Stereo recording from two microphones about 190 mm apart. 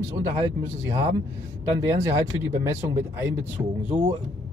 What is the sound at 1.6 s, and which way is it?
Speech, 15° right (ahead or behind).